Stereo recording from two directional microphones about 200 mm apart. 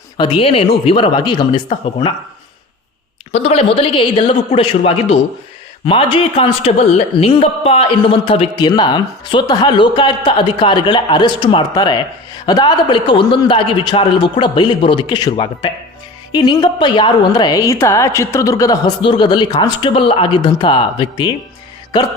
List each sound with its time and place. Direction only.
0.2 s a man's voice: 25° left (ahead or behind)
3.3 s a man's voice: 30° left (ahead or behind)